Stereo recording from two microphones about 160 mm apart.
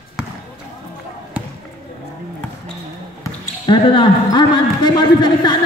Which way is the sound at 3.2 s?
30° left (ahead or behind).